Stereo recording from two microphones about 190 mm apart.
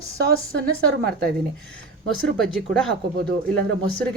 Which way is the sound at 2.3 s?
5° left (ahead or behind).